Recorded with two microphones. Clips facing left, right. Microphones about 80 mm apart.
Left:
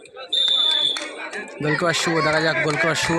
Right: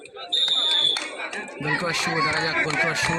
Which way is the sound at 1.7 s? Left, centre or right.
Left.